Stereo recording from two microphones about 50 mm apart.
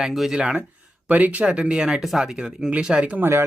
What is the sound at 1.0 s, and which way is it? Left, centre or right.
A man's voice, right.